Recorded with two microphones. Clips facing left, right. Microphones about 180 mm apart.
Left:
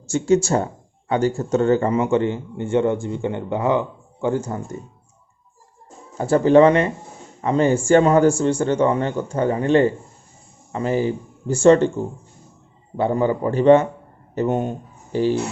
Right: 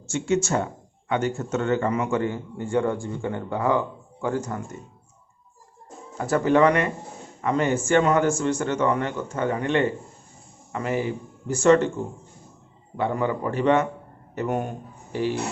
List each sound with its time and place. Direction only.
0.1 s speech: 35° left (ahead or behind)
6.1 s speech: 30° left (ahead or behind)
13.0 s speech: 30° left (ahead or behind)